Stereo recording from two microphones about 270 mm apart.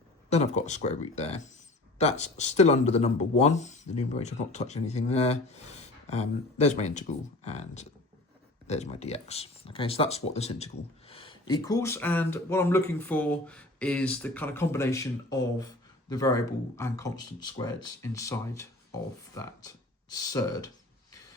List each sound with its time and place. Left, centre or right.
0.3 s speech: left